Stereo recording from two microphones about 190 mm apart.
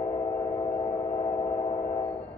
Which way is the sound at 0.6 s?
30° left (ahead or behind).